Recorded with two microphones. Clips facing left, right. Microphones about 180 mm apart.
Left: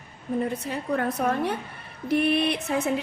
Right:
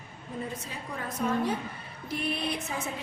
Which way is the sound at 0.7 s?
65° left (ahead or behind).